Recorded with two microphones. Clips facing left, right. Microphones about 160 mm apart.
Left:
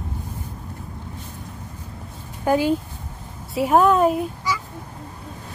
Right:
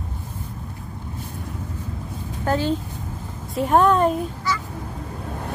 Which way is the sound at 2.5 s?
10° left (ahead or behind).